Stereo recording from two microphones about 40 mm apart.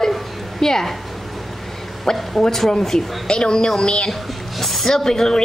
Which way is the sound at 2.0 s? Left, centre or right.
Centre.